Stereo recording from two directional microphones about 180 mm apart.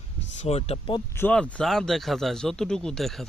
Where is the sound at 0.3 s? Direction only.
35° left (ahead or behind).